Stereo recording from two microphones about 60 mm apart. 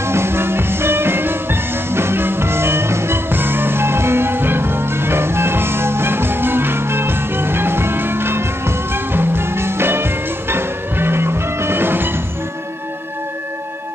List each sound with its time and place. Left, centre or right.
0.0 s music: right